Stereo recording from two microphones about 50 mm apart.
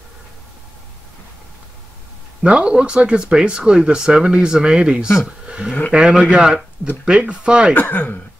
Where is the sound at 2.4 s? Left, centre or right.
Right.